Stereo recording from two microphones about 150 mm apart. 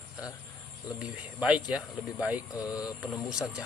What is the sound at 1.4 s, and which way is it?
Speech, 5° right (ahead or behind).